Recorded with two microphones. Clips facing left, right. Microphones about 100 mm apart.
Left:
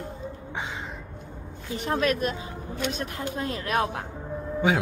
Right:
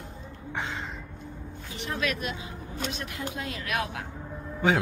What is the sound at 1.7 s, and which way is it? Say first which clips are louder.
A woman's voice: left 6 dB; 40° left (ahead or behind).